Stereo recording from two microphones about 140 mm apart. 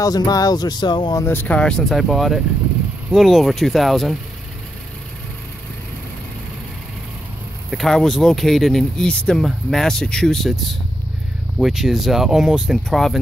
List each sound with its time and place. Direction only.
0.0 s speech: 25° left (ahead or behind)
1.2 s speech: 15° left (ahead or behind)
7.7 s speech: centre (ahead or behind)